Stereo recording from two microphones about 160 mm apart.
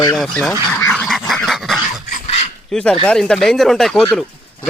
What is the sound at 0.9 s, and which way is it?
Duck, centre (ahead or behind).